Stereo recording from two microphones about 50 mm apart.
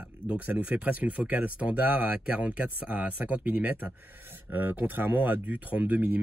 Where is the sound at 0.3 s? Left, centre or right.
Right.